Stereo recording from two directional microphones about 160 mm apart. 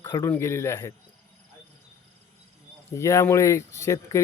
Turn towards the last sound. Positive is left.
turn(degrees=20)  # may be behind; listen again after turning